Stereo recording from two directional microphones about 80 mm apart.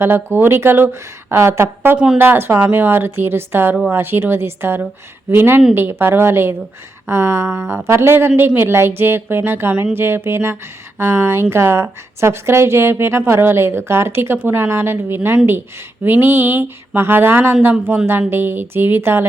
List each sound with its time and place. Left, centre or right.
0.0 s speech: right